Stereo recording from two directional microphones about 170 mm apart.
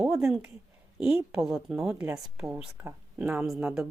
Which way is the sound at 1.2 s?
5° right (ahead or behind).